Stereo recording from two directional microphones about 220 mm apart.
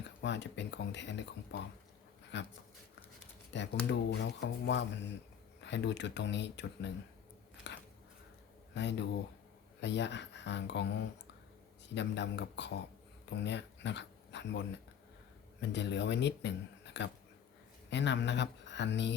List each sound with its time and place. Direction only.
0.2 s speech: 50° left (ahead or behind)
3.5 s speech: 55° left (ahead or behind)
7.6 s a sound: 50° left (ahead or behind)
8.7 s speech: 50° left (ahead or behind)
15.7 s speech: 55° left (ahead or behind)